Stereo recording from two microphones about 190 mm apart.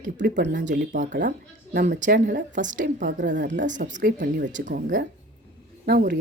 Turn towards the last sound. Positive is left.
turn(degrees=-55)  # may be behind; listen again after turning